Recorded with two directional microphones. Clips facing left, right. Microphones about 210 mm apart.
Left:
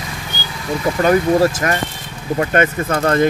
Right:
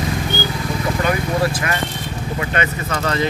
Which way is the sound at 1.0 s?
45° left (ahead or behind).